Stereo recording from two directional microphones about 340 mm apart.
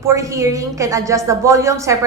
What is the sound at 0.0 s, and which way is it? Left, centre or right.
A woman's voice, centre.